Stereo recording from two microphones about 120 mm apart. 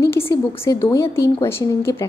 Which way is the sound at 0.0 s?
20° left (ahead or behind).